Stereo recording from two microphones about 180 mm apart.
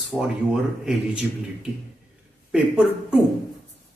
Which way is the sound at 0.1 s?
5° left (ahead or behind).